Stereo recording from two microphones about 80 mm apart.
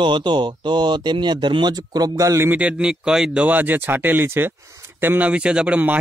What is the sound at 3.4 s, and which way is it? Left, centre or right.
Speech, right.